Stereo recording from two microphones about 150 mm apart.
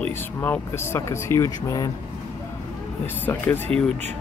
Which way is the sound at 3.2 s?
10° left (ahead or behind).